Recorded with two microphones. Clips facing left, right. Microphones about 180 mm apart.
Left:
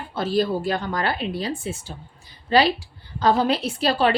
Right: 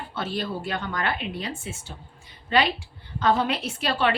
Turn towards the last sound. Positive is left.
turn(degrees=35)  # may be behind; listen again after turning